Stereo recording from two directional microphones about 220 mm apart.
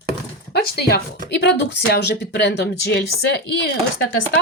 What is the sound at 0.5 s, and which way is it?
A woman's voice, 45° left (ahead or behind).